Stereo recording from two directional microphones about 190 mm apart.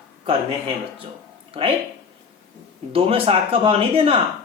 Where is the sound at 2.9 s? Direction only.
30° right (ahead or behind).